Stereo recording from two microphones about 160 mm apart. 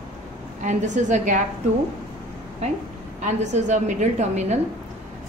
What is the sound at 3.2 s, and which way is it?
A woman's voice, 50° right (ahead or behind).